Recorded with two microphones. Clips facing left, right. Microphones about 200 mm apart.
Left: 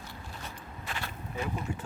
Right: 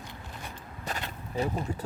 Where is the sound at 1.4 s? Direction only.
35° right (ahead or behind).